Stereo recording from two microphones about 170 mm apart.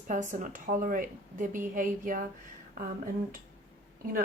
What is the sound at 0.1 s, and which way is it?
Speech, 50° right (ahead or behind).